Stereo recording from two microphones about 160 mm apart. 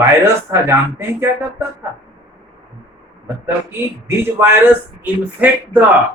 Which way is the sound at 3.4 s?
15° right (ahead or behind).